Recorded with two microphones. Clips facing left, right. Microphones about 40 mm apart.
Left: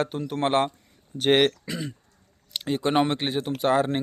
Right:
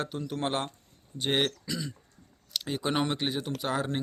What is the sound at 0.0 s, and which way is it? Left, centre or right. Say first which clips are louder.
Speech: left 6 dB; left.